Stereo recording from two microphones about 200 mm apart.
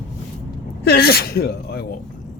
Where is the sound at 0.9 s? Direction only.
50° left (ahead or behind).